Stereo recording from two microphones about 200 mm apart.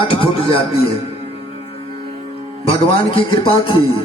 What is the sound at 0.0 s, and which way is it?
Music, 25° left (ahead or behind).